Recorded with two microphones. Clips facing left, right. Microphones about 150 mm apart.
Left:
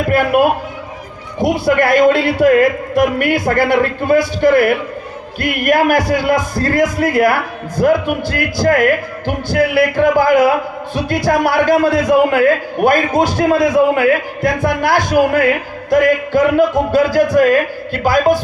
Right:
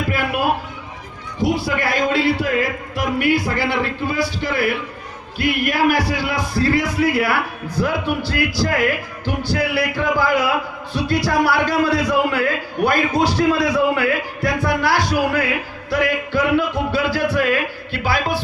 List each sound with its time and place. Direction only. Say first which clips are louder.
0.1 s a man's voice: left 13 dB; 50° left (ahead or behind)
1.6 s a man's voice: left 10 dB; 55° left (ahead or behind)